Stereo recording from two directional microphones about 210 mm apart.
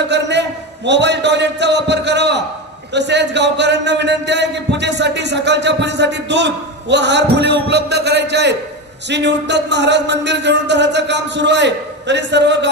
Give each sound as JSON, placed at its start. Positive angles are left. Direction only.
{"t": 0.0, "sound": "a man's voice", "side_deg": -55}